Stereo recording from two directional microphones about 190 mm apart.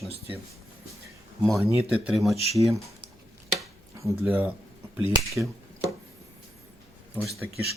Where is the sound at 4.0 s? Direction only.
15° right (ahead or behind).